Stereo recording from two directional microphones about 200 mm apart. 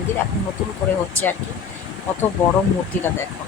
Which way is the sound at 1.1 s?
10° left (ahead or behind).